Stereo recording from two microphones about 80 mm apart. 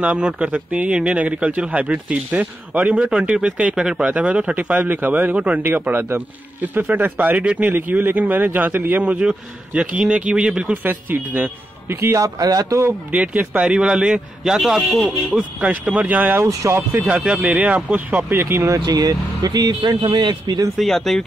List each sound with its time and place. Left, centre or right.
0.0 s speech: centre
10.8 s a man's voice: right
12.0 s speech: right
12.4 s speech: right
13.1 s speech: centre
15.3 s a man's voice: centre
16.4 s speech: right
17.2 s speech: centre
18.7 s speech: right
20.7 s speech: centre